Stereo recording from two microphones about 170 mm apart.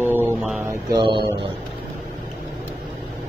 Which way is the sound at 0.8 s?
25° right (ahead or behind).